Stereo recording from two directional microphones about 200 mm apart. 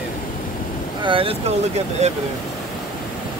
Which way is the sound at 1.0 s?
25° right (ahead or behind).